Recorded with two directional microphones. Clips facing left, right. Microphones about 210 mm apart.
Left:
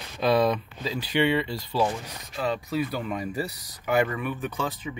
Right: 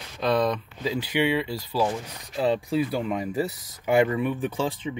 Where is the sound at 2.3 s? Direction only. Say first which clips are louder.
Right 4 dB; 30° right (ahead or behind).